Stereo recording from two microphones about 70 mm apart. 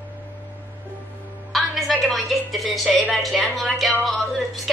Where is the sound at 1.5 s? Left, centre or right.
Centre.